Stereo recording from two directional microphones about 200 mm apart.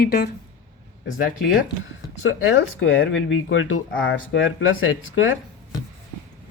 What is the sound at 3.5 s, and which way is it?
Speech, 70° left (ahead or behind).